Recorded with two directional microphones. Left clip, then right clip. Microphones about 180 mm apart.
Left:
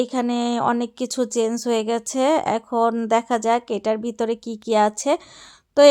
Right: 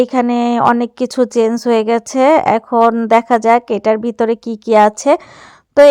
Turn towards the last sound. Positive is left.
turn(degrees=-15)  # may be behind; listen again after turning